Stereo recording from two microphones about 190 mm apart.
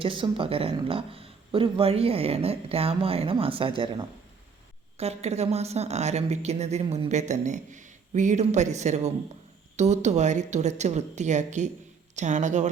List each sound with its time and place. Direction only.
0.0 s a woman's voice: 25° right (ahead or behind)